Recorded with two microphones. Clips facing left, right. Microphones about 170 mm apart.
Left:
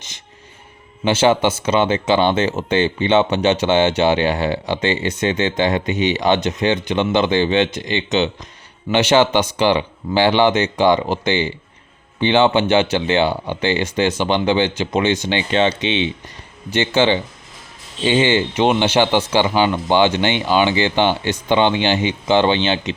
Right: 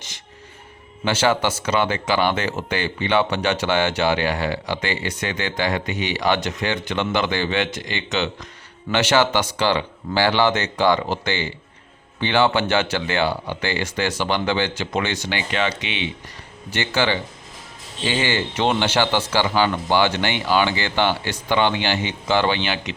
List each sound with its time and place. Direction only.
1.0 s speech: 20° left (ahead or behind)